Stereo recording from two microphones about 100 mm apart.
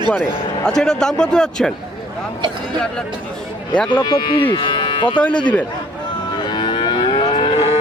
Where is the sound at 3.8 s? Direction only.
50° left (ahead or behind).